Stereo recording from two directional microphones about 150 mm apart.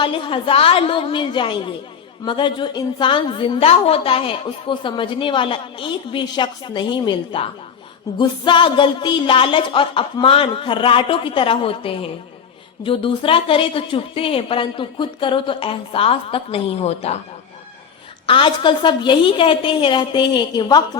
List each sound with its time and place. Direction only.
0.0 s a woman's voice: 35° left (ahead or behind)
18.3 s a woman's voice: 35° left (ahead or behind)